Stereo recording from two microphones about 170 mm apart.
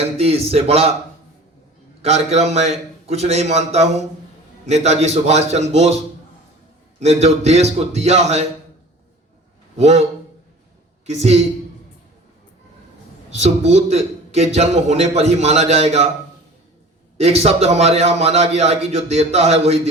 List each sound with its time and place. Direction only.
0.0 s a man's voice: 35° right (ahead or behind)
2.0 s a man's voice: 40° right (ahead or behind)
7.0 s a man's voice: 40° right (ahead or behind)
9.7 s a man's voice: 40° right (ahead or behind)
11.0 s a woman's voice: 40° right (ahead or behind)
13.3 s a man's voice: 40° right (ahead or behind)
17.2 s a man's voice: 40° right (ahead or behind)